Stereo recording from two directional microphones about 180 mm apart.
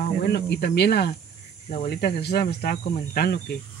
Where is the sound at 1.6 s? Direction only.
50° left (ahead or behind).